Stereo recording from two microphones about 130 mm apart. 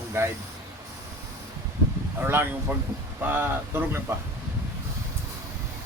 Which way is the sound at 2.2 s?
15° right (ahead or behind).